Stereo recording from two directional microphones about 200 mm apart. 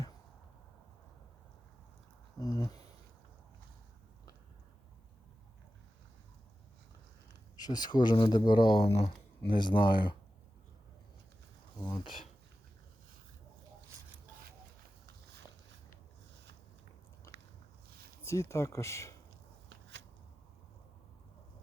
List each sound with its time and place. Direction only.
2.4 s a sound: 15° left (ahead or behind)
7.5 s speech: 20° left (ahead or behind)
11.8 s speech: 25° left (ahead or behind)
18.2 s speech: 15° left (ahead or behind)